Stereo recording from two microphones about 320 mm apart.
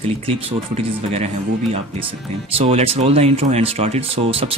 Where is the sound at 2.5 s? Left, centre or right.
Centre.